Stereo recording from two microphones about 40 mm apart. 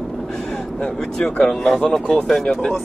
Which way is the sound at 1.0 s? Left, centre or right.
Centre.